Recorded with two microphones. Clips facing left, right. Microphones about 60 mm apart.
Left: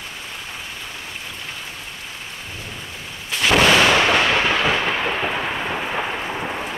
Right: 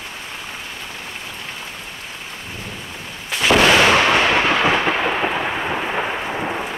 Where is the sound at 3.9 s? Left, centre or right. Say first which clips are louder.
Right 2 dB; centre.